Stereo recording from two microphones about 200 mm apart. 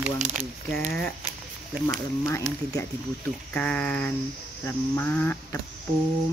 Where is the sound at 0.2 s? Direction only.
40° right (ahead or behind).